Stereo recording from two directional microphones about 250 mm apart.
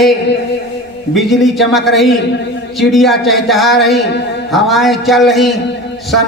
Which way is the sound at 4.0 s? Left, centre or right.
Left.